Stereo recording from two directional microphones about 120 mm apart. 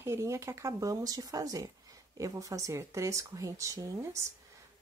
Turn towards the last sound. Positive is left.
turn(degrees=-25)  # may be behind; listen again after turning